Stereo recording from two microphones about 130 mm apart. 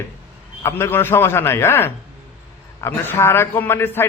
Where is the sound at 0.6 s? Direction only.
20° left (ahead or behind).